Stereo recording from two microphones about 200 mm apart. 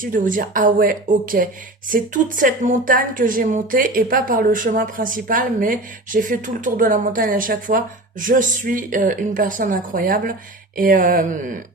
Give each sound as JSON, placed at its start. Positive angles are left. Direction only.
{"t": 0.0, "sound": "a woman's voice", "side_deg": -45}